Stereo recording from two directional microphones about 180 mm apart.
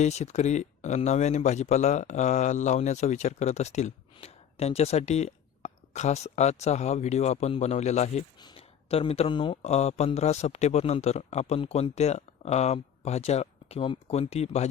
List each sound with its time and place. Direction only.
0.0 s speech: 40° left (ahead or behind)